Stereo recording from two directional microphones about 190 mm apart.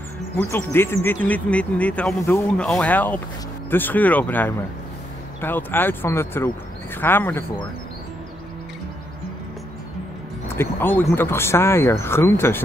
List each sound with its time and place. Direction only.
0.4 s speech: 10° left (ahead or behind)
10.5 s speech: 10° left (ahead or behind)